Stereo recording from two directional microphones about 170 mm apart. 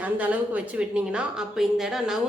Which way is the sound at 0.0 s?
10° right (ahead or behind).